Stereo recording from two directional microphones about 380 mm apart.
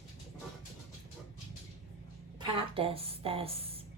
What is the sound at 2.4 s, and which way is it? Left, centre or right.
A woman's voice, centre.